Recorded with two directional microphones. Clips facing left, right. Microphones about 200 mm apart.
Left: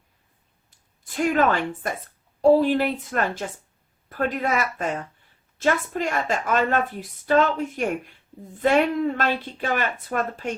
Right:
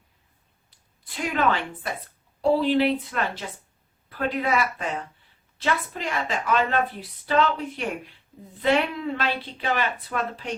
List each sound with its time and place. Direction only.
1.0 s a woman's voice: 45° left (ahead or behind)